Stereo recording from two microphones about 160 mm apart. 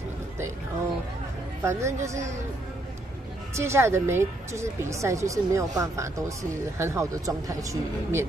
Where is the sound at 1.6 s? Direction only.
20° right (ahead or behind).